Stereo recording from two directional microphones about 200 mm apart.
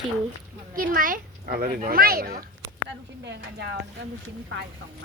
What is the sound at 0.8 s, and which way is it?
A child's voice, 45° right (ahead or behind).